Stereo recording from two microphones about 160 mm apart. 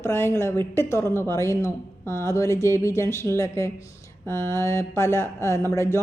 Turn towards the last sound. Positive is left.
turn(degrees=15)  # may be behind; listen again after turning